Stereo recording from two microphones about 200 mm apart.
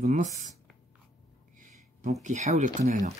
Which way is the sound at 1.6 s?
40° right (ahead or behind).